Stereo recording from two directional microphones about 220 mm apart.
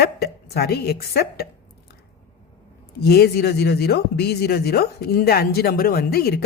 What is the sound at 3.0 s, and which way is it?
Speech, 45° left (ahead or behind).